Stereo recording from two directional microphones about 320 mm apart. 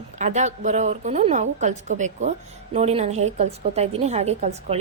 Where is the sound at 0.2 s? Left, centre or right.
Right.